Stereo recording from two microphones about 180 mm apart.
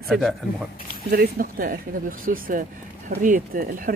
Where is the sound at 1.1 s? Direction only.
55° right (ahead or behind).